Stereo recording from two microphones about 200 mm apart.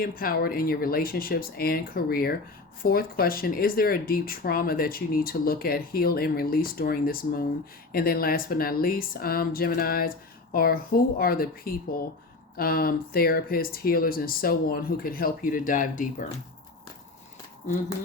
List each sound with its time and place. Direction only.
0.0 s speech: 45° left (ahead or behind)